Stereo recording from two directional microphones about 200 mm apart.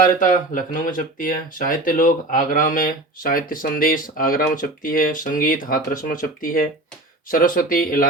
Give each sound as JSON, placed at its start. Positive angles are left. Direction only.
{"t": 0.0, "sound": "speech", "side_deg": 40}